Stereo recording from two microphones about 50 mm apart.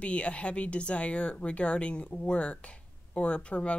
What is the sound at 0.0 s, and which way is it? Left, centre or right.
Speech, left.